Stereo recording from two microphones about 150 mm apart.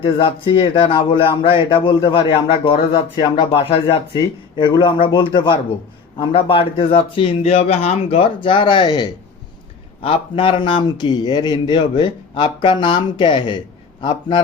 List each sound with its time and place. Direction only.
0.0 s speech: 35° left (ahead or behind)
3.5 s speech: 40° left (ahead or behind)
4.2 s speech: 25° left (ahead or behind)